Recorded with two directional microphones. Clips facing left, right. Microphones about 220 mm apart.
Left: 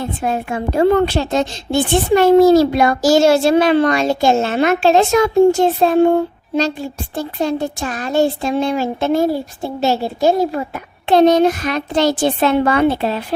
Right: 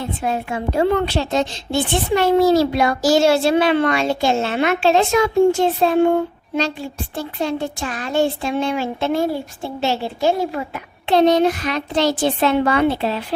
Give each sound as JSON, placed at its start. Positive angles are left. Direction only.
{"t": 0.0, "sound": "a woman's voice", "side_deg": 50}
{"t": 7.2, "sound": "a woman's voice", "side_deg": 40}